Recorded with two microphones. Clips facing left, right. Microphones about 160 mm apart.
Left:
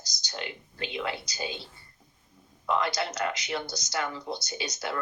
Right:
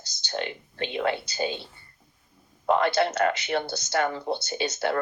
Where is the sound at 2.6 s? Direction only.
55° right (ahead or behind).